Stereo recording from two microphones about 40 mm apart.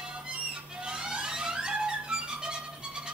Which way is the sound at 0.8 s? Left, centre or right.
Centre.